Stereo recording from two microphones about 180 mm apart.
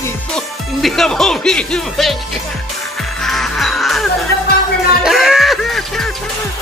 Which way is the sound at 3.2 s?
Centre (ahead or behind).